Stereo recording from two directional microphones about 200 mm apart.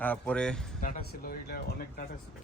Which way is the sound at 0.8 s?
40° left (ahead or behind).